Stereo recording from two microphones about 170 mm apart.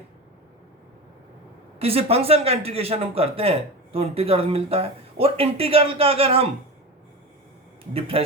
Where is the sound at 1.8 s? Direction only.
35° right (ahead or behind).